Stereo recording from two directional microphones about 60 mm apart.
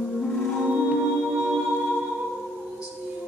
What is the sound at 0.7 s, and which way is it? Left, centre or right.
Music, right.